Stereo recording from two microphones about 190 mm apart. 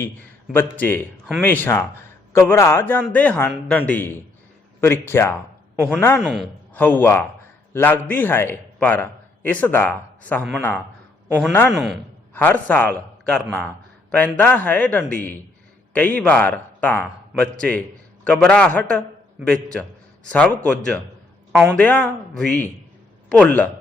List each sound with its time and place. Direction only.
0.5 s speech: 10° left (ahead or behind)
6.2 s a man's voice: centre (ahead or behind)
11.3 s a man's voice: 5° right (ahead or behind)
12.3 s a man's voice: 10° left (ahead or behind)
20.3 s a man's voice: 5° left (ahead or behind)